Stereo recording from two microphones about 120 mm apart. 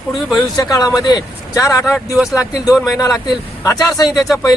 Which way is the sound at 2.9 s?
25° left (ahead or behind).